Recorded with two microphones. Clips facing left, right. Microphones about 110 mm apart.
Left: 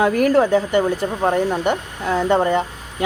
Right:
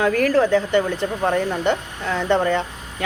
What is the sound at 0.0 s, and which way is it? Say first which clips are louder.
Speech: left 2 dB; 20° left (ahead or behind).